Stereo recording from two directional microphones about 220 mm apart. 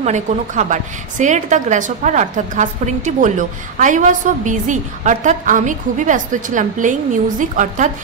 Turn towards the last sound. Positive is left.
turn(degrees=-35)  # may be behind; listen again after turning